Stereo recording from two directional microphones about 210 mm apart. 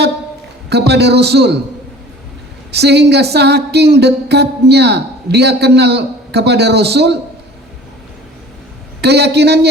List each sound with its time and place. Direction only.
0.7 s speech: 50° right (ahead or behind)
2.7 s speech: 50° right (ahead or behind)
9.0 s a man's voice: 50° right (ahead or behind)